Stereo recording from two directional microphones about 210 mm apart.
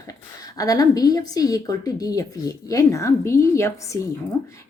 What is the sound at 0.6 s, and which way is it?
Speech, 15° left (ahead or behind).